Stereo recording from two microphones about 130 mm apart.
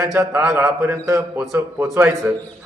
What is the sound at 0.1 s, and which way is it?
A man's voice, 15° right (ahead or behind).